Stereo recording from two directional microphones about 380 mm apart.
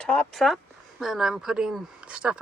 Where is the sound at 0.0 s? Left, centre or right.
Centre.